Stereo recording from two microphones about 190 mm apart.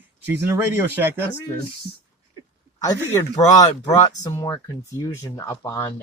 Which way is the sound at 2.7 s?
20° left (ahead or behind).